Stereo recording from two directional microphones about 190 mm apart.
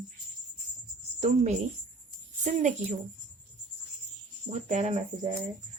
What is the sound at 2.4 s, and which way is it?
Speech, 40° right (ahead or behind).